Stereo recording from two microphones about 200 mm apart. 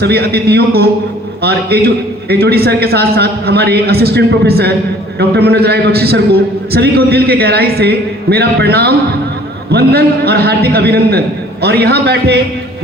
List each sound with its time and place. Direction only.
0.0 s a man's voice: 55° right (ahead or behind)